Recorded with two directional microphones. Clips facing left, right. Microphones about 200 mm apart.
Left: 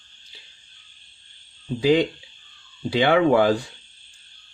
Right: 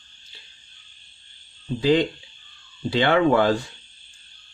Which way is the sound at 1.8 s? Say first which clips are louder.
Left 1 dB; 10° left (ahead or behind).